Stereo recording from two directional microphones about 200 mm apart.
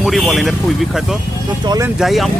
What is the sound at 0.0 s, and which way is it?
Speech, centre (ahead or behind).